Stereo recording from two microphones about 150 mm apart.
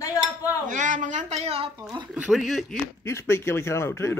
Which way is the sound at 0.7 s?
60° right (ahead or behind).